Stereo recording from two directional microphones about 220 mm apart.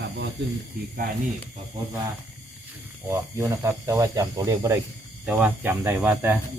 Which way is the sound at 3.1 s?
15° right (ahead or behind).